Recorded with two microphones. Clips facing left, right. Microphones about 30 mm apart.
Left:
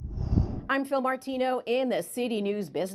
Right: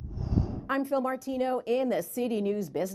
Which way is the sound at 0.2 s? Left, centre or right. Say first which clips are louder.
Left 1 dB; centre.